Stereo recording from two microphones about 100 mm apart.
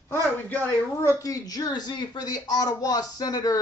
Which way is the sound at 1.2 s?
35° left (ahead or behind).